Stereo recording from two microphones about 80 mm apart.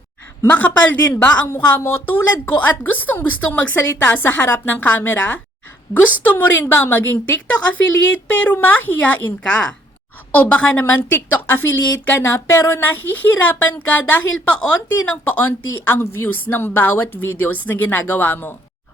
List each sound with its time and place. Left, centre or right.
0.4 s a woman's voice: left
12.8 s a woman's voice: left